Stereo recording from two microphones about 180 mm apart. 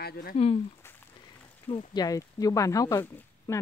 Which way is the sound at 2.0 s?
20° left (ahead or behind).